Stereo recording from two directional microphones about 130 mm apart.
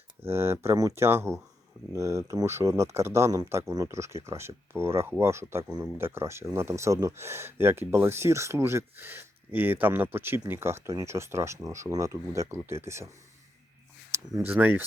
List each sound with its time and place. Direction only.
0.3 s speech: 20° right (ahead or behind)
14.1 s speech: 20° right (ahead or behind)